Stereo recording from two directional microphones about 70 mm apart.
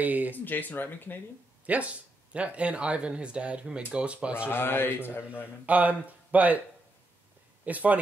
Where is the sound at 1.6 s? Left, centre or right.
Right.